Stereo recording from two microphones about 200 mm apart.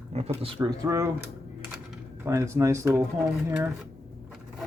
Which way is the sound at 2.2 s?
15° right (ahead or behind).